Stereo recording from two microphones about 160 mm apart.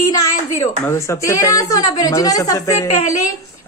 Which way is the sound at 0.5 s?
15° left (ahead or behind).